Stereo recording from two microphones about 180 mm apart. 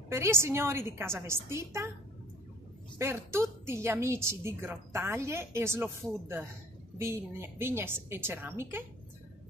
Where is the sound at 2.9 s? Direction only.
15° right (ahead or behind).